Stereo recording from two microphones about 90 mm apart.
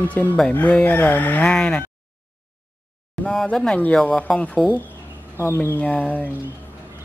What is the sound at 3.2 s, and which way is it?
Speech, 10° left (ahead or behind).